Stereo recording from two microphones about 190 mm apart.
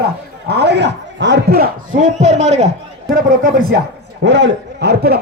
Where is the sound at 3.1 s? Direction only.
50° right (ahead or behind).